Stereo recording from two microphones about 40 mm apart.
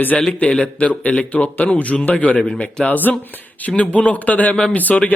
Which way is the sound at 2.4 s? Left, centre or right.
Left.